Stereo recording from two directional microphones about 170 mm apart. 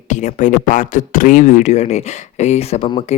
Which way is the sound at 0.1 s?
45° left (ahead or behind).